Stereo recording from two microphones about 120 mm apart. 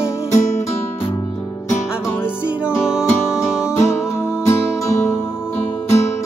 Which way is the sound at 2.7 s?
20° left (ahead or behind).